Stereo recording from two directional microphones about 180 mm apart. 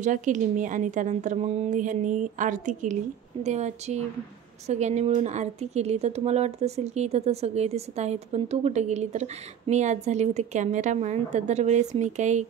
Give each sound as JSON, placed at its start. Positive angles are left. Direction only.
{"t": 0.0, "sound": "a woman's voice", "side_deg": -45}